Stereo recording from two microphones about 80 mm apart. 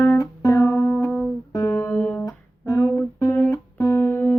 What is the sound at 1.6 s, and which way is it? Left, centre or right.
Music, left.